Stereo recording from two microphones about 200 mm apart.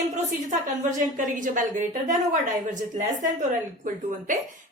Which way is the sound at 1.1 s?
40° right (ahead or behind).